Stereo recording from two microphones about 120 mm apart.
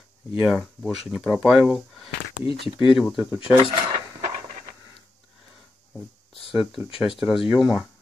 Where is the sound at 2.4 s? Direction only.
45° left (ahead or behind).